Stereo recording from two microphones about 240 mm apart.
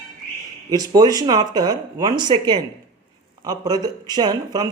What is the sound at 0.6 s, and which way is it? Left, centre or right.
Speech, centre.